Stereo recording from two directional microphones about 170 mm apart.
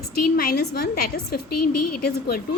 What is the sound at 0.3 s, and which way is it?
A woman's voice, 70° left (ahead or behind).